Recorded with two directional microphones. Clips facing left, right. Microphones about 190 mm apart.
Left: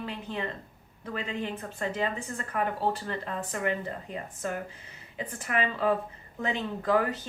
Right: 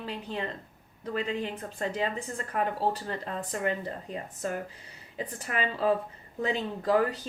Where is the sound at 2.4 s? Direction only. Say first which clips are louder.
Right 1 dB; 35° right (ahead or behind).